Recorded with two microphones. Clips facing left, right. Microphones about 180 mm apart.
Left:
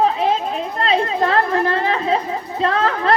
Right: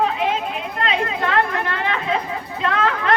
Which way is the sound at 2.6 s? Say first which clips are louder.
Left 2 dB; 35° left (ahead or behind).